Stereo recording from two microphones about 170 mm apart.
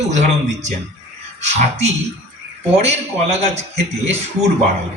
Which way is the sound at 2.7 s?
40° right (ahead or behind).